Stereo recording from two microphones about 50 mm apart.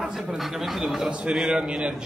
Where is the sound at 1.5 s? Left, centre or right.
Centre.